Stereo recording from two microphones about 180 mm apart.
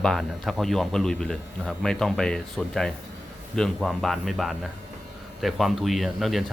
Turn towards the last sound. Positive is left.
turn(degrees=0)  # may be behind; listen again after turning